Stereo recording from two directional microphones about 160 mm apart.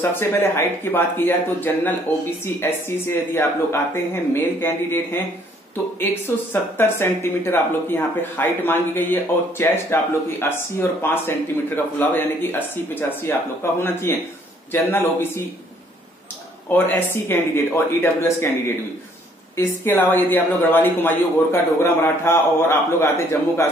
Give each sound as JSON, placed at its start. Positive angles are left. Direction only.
{"t": 0.0, "sound": "speech", "side_deg": 15}
{"t": 16.7, "sound": "speech", "side_deg": 15}
{"t": 19.5, "sound": "speech", "side_deg": 15}